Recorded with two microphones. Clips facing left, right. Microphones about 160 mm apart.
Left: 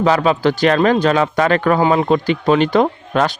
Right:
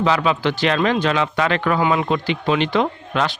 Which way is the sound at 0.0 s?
40° left (ahead or behind).